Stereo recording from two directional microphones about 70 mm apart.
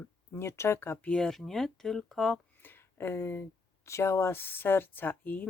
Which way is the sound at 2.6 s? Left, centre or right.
Left.